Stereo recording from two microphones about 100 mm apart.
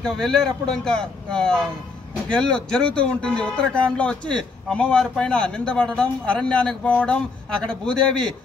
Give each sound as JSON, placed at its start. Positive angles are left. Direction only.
{"t": 0.0, "sound": "speech", "side_deg": 5}